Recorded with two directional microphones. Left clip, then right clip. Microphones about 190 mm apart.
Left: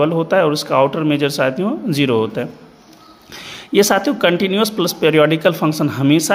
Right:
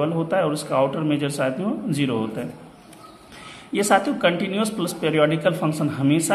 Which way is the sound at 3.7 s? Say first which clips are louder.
Left 5 dB; 45° left (ahead or behind).